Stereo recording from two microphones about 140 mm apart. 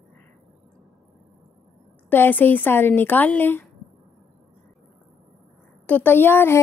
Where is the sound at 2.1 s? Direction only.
15° left (ahead or behind).